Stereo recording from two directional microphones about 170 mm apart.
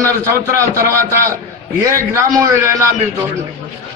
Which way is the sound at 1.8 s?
15° right (ahead or behind).